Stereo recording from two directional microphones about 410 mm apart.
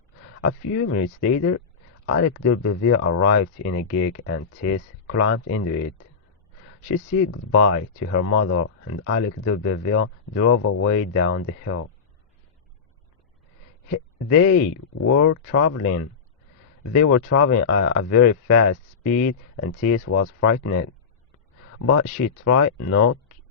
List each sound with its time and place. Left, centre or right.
0.4 s speech: left
13.9 s speech: left